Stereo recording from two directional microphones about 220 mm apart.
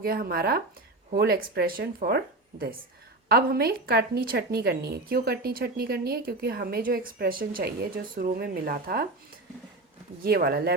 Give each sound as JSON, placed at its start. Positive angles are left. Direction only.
{"t": 0.0, "sound": "a woman's voice", "side_deg": -45}
{"t": 10.2, "sound": "a woman's voice", "side_deg": -45}